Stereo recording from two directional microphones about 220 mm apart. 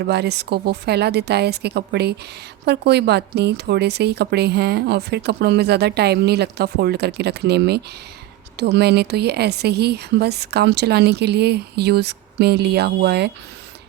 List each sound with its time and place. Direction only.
0.0 s a woman's voice: 50° right (ahead or behind)